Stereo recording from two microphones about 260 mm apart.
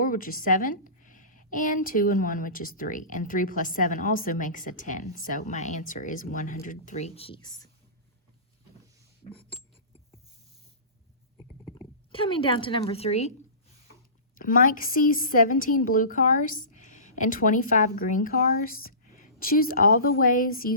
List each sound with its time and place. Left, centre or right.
0.0 s a woman's voice: left
12.1 s a woman's voice: centre
14.3 s a woman's voice: left